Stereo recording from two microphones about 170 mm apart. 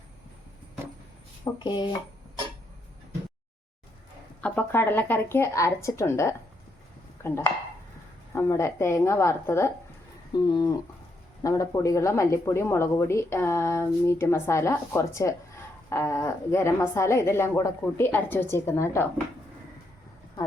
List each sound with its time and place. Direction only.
1.5 s speech: 25° left (ahead or behind)
4.4 s speech: 10° left (ahead or behind)